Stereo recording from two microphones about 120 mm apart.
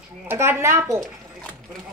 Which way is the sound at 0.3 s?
20° right (ahead or behind).